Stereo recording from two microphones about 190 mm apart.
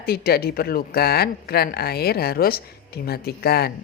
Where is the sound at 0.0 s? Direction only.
55° left (ahead or behind).